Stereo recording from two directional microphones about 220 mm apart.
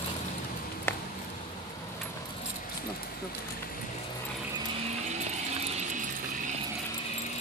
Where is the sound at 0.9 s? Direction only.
10° left (ahead or behind).